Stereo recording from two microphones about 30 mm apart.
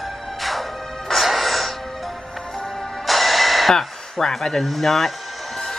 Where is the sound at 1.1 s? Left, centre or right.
Centre.